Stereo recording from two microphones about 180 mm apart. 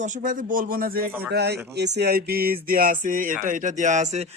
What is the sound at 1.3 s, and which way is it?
Speech, 65° right (ahead or behind).